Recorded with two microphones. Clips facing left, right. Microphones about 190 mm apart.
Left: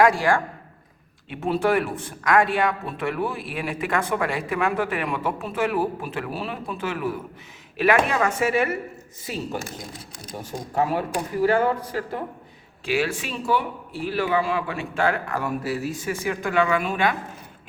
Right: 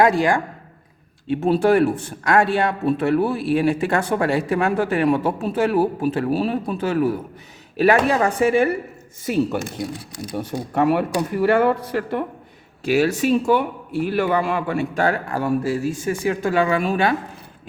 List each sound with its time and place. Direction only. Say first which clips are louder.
0.0 s speech: right 2 dB; 20° right (ahead or behind)
1.3 s speech: right 5 dB; 30° right (ahead or behind)
9.2 s speech: right 9 dB; 60° right (ahead or behind)
12.8 s speech: right 7 dB; 40° right (ahead or behind)